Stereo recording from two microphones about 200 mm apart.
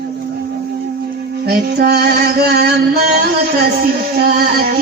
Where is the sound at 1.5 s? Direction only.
50° right (ahead or behind).